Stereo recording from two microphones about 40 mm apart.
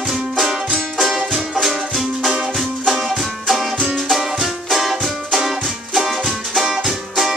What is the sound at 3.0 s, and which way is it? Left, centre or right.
Music, centre.